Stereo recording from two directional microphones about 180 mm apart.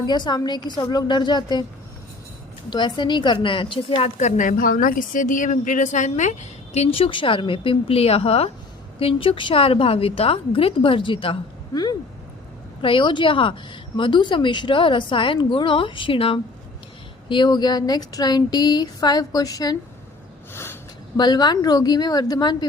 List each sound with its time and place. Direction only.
0.0 s a woman's voice: 25° left (ahead or behind)
2.6 s a woman's voice: 25° left (ahead or behind)
20.5 s a sound: 15° left (ahead or behind)
21.2 s a woman's voice: 25° left (ahead or behind)